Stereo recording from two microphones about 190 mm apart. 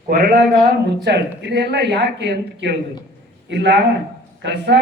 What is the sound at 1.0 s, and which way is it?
A woman's voice, 60° right (ahead or behind).